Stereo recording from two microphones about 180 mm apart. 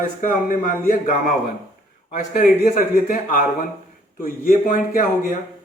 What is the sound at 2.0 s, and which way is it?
Speech, 50° left (ahead or behind).